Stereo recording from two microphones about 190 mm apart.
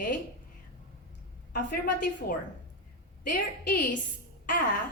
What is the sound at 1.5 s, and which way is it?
A woman's voice, 45° left (ahead or behind).